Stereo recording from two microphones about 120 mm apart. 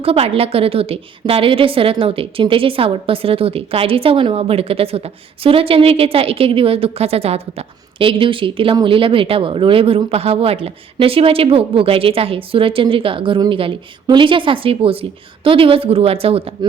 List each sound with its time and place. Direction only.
0.0 s a woman's voice: 55° right (ahead or behind)
7.9 s a woman's voice: 45° right (ahead or behind)